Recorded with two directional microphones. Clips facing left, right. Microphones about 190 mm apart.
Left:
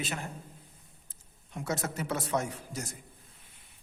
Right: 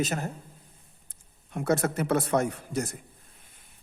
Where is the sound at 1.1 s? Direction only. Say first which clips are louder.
Right 5 dB; 55° right (ahead or behind).